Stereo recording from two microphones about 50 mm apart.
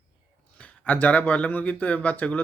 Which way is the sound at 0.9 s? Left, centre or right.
Left.